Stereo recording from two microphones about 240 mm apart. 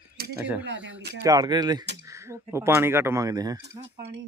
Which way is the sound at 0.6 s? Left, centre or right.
Right.